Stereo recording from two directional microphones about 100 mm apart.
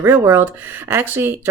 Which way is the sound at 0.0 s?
25° right (ahead or behind).